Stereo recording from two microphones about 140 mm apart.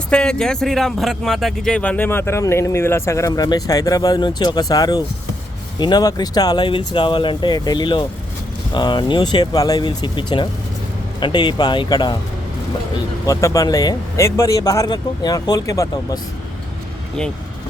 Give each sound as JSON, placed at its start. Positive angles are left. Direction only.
{"t": 0.1, "sound": "speech", "side_deg": 5}
{"t": 13.2, "sound": "speech", "side_deg": 25}